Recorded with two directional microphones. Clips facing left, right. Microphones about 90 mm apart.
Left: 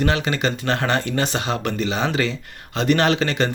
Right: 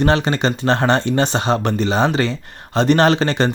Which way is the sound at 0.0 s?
35° right (ahead or behind).